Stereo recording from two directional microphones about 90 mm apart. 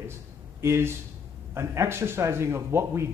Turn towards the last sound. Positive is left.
turn(degrees=-30)  # may be behind; listen again after turning